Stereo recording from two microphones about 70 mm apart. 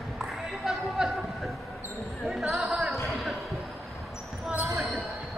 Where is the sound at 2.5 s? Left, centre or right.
Centre.